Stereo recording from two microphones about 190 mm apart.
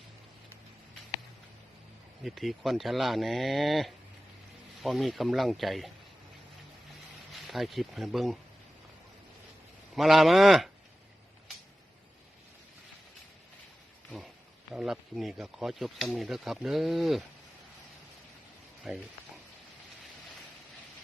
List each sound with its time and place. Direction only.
2.2 s speech: centre (ahead or behind)
7.3 s speech: centre (ahead or behind)
9.9 s speech: centre (ahead or behind)
14.7 s speech: centre (ahead or behind)
18.9 s speech: 5° right (ahead or behind)